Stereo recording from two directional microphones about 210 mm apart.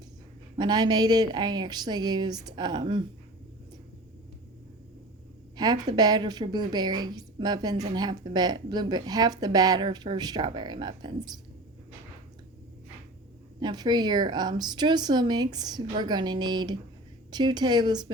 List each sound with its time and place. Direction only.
0.5 s a woman's voice: 20° right (ahead or behind)
5.5 s a woman's voice: 20° right (ahead or behind)
13.6 s a woman's voice: 20° right (ahead or behind)